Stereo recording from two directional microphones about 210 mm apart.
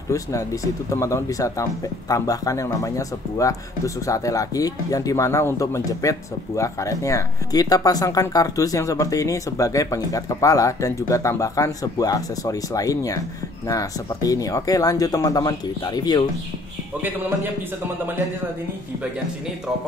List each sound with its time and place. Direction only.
0.1 s speech: 15° left (ahead or behind)